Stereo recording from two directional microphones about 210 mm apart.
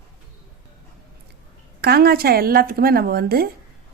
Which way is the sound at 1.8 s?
50° right (ahead or behind).